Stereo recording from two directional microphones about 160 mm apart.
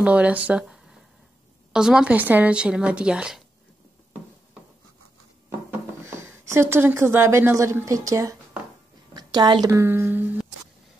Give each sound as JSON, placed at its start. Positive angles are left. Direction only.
{"t": 0.0, "sound": "a woman's voice", "side_deg": -10}
{"t": 5.7, "sound": "speech", "side_deg": -15}
{"t": 9.1, "sound": "a sound", "side_deg": -25}
{"t": 9.7, "sound": "a woman's voice", "side_deg": -15}